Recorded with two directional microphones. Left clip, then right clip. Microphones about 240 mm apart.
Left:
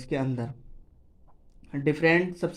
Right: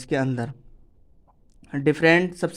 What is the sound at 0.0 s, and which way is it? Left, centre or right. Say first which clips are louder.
Speech: right 5 dB; right.